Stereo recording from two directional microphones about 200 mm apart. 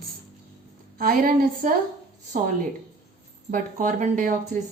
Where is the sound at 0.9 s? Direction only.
45° right (ahead or behind).